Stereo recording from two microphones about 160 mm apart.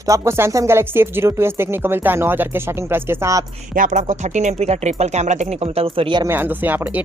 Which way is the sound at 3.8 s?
50° right (ahead or behind).